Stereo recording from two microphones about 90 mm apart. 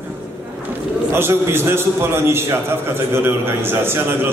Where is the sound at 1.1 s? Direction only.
25° right (ahead or behind).